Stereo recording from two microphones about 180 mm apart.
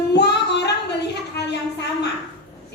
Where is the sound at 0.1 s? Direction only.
70° left (ahead or behind).